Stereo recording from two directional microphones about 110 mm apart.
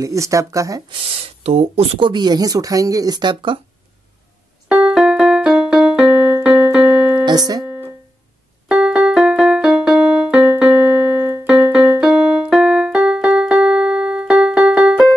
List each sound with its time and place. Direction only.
0.0 s speech: 30° right (ahead or behind)
0.8 s speech: 60° right (ahead or behind)
2.0 s speech: 45° right (ahead or behind)
4.6 s keyboard: 10° right (ahead or behind)
7.2 s speech: 35° right (ahead or behind)
7.6 s music: 15° right (ahead or behind)
8.6 s music: 5° right (ahead or behind)
11.4 s keyboard: 5° right (ahead or behind)